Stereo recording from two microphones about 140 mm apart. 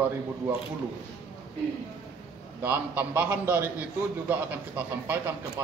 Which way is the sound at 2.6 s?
15° right (ahead or behind).